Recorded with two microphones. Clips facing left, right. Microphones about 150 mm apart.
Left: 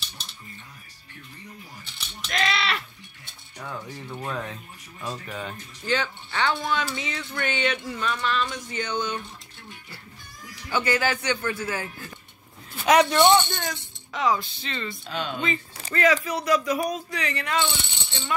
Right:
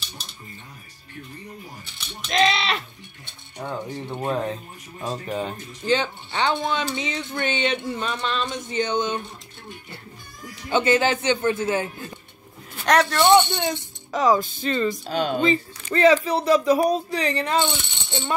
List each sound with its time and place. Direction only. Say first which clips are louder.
2.2 s a sound: right 5 dB; 20° right (ahead or behind)
3.5 s speech: right 6 dB; 25° right (ahead or behind)
10.5 s speech: right 5 dB; 25° right (ahead or behind)
12.8 s speech: left 1 dB; 10° left (ahead or behind)
14.1 s speech: right 5 dB; 40° right (ahead or behind)